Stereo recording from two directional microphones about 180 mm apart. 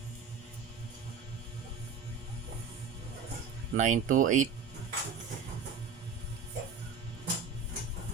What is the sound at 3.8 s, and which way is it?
Speech, 45° right (ahead or behind).